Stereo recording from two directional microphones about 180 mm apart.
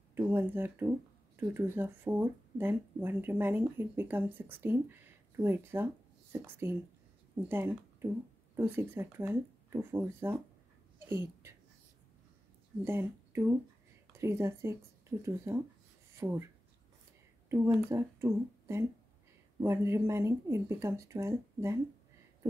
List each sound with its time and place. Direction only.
0.1 s speech: 10° right (ahead or behind)
12.8 s a woman's voice: 15° right (ahead or behind)
17.7 s speech: 15° right (ahead or behind)